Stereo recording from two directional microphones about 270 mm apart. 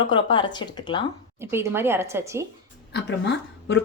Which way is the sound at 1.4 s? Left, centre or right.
Centre.